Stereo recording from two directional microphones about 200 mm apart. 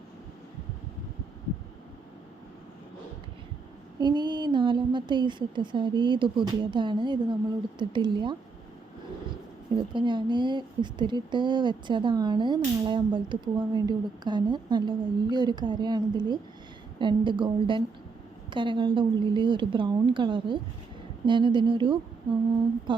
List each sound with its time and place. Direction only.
4.0 s speech: 20° right (ahead or behind)
9.7 s speech: 25° right (ahead or behind)